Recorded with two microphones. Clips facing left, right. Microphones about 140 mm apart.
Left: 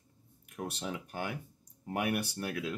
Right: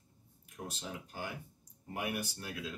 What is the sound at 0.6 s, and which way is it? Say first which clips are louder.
Speech: left 6 dB; 70° left (ahead or behind).